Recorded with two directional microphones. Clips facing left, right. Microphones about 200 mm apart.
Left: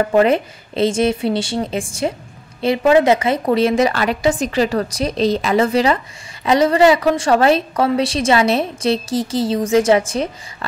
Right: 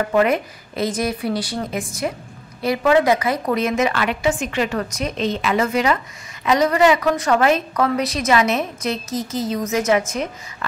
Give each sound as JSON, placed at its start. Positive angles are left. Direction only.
{"t": 0.0, "sound": "a woman's voice", "side_deg": 30}